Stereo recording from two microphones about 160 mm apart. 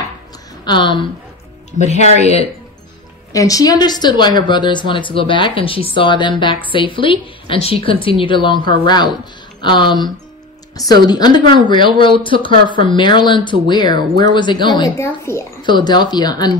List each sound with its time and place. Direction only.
0.7 s speech: 30° left (ahead or behind)
1.7 s speech: 45° left (ahead or behind)
3.3 s speech: 20° left (ahead or behind)
15.0 s speech: 15° left (ahead or behind)
15.6 s speech: 25° left (ahead or behind)